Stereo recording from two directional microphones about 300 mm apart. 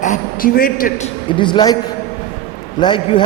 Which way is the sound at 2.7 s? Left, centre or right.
Centre.